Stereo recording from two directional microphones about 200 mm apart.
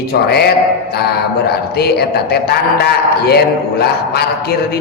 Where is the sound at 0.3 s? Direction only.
50° left (ahead or behind).